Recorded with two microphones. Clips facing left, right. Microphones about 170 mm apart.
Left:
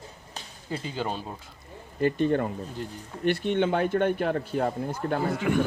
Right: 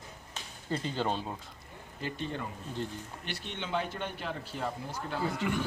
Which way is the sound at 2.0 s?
55° left (ahead or behind).